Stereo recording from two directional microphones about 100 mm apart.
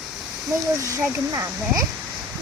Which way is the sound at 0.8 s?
30° right (ahead or behind).